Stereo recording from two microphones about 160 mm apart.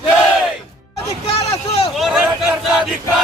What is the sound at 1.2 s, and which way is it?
Vehicle, 40° left (ahead or behind).